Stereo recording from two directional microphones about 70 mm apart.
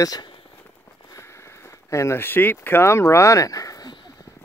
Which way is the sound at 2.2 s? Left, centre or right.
Left.